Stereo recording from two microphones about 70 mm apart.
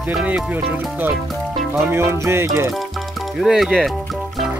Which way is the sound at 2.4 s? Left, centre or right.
Right.